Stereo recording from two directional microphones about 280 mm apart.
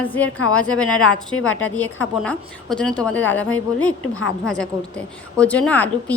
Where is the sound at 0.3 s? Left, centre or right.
Left.